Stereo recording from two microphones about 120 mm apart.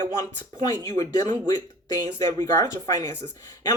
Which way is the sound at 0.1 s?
30° left (ahead or behind).